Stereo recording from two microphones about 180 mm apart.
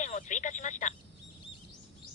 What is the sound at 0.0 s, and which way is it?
Telephone, 45° left (ahead or behind).